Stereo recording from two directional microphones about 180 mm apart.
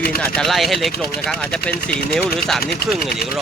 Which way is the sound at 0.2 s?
5° left (ahead or behind).